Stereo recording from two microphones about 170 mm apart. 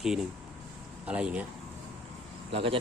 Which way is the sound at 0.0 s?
Centre (ahead or behind).